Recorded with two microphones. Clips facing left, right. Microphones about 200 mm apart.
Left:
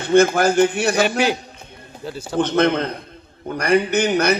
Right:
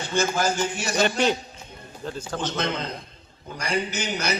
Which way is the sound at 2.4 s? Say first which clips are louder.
Left 12 dB; 60° left (ahead or behind).